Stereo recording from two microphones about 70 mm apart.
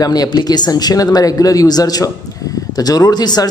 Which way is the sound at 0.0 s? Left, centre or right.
Left.